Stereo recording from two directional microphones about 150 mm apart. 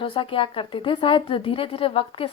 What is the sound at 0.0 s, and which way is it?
Speech, 35° left (ahead or behind).